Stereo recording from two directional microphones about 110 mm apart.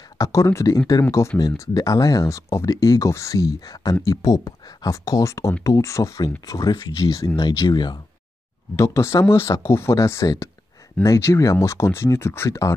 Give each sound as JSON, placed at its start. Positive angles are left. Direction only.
{"t": 0.2, "sound": "speech", "side_deg": 30}
{"t": 7.3, "sound": "speech", "side_deg": 40}
{"t": 8.7, "sound": "speech", "side_deg": 25}